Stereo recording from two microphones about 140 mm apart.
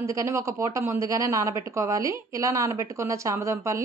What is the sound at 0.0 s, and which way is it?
A woman's voice, 20° right (ahead or behind).